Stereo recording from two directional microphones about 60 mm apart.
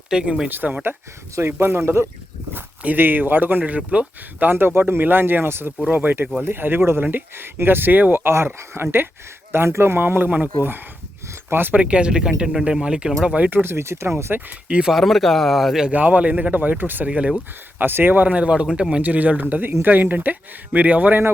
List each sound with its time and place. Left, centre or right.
0.1 s speech: centre
0.4 s speech: right
11.8 s speech: centre
13.5 s speech: right
14.7 s speech: centre
14.9 s a man's voice: centre
15.9 s speech: right
17.1 s speech: centre
17.7 s speech: right